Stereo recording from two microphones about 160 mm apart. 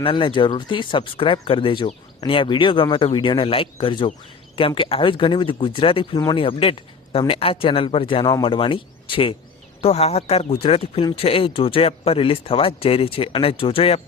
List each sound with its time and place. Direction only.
0.0 s speech: 30° left (ahead or behind)